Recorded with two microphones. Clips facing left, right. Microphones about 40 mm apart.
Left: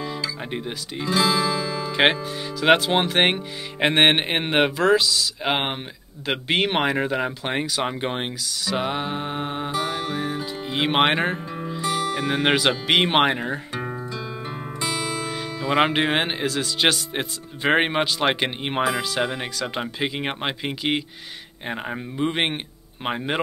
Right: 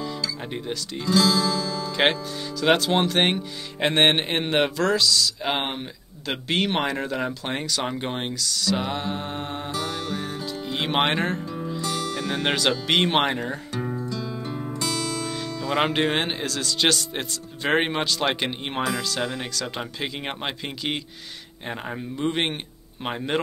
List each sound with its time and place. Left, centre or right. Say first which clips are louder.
0.0 s speech: left 1 dB; centre